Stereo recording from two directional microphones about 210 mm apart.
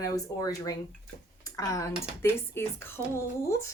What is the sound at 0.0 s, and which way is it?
A woman's voice, 15° left (ahead or behind).